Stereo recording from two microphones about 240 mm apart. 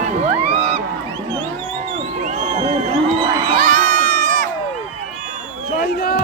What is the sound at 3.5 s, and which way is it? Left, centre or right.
Crowd, right.